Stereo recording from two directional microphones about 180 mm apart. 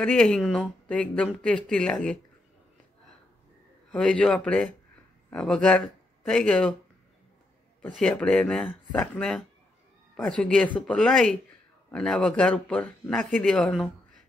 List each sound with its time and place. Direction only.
0.0 s speech: 5° left (ahead or behind)
3.9 s speech: 5° left (ahead or behind)
7.9 s speech: centre (ahead or behind)